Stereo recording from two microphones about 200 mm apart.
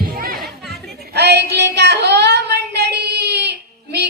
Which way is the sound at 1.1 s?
55° right (ahead or behind).